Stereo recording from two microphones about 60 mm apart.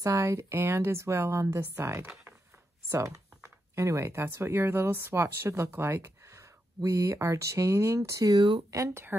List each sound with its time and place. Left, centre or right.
0.0 s speech: right
1.5 s speech: right
8.1 s speech: right